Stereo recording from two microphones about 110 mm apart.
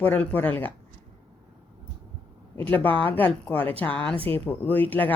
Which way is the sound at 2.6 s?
15° left (ahead or behind).